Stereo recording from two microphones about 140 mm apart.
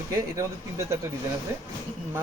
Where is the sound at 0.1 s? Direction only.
25° right (ahead or behind).